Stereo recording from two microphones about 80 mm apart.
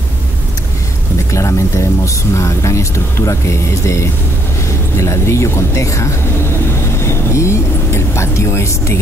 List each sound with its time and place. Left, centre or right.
1.3 s speech: left
6.7 s vehicle: left